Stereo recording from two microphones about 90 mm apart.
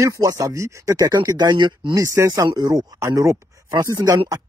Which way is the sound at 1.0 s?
45° right (ahead or behind).